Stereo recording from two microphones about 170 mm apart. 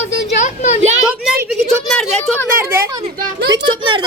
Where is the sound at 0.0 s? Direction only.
45° left (ahead or behind).